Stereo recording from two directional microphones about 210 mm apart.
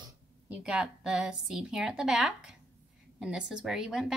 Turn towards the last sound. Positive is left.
turn(degrees=0)  # may be behind; listen again after turning